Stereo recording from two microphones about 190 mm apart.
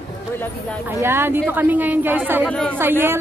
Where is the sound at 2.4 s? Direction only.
5° left (ahead or behind).